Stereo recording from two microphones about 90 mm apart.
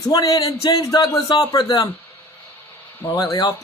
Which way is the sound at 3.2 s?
50° left (ahead or behind).